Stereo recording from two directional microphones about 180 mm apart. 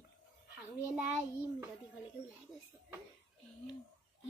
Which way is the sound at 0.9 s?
5° right (ahead or behind).